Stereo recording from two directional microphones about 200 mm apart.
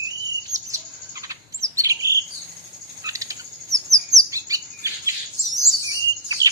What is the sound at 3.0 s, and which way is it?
Chirp, 15° right (ahead or behind).